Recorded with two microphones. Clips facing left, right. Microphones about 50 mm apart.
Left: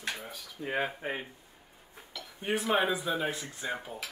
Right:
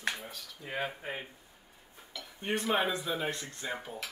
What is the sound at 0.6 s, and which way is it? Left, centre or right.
Speech, left.